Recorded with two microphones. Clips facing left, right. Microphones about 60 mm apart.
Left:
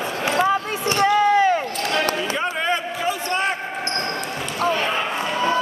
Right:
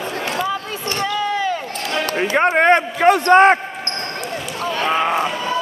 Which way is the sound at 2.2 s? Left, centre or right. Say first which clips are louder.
Right 8 dB; right.